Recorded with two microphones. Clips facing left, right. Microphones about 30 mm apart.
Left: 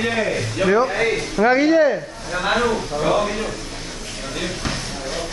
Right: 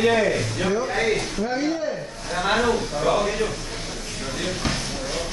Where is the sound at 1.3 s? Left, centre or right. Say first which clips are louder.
Left 10 dB; left.